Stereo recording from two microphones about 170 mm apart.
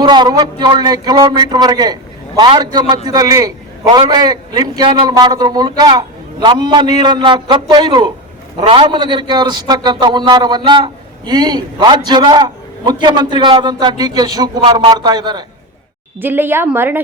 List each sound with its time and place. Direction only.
0.0 s a man's voice: 25° right (ahead or behind)
16.2 s a woman's voice: 10° right (ahead or behind)